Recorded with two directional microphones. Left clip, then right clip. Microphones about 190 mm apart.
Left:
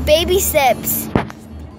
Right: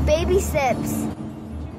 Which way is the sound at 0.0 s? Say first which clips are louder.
Left 6 dB; 15° left (ahead or behind).